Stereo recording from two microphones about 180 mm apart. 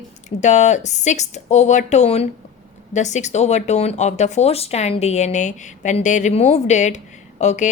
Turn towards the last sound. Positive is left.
turn(degrees=40)  # may be behind; listen again after turning